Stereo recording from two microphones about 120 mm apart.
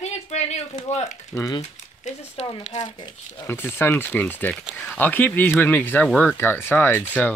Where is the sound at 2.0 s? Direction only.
90° left.